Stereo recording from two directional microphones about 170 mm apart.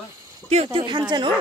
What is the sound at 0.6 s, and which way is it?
Speech, 25° right (ahead or behind).